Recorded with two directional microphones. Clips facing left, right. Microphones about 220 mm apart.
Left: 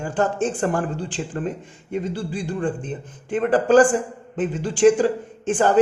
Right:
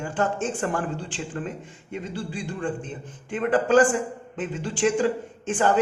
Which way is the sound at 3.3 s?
40° left (ahead or behind).